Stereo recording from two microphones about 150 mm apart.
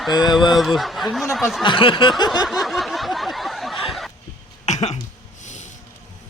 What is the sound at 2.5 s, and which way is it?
Snicker, centre (ahead or behind).